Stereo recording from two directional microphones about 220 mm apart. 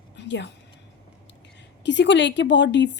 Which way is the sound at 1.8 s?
55° left (ahead or behind).